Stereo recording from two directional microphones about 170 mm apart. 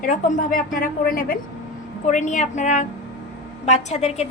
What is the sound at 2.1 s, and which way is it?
A woman's voice, 45° left (ahead or behind).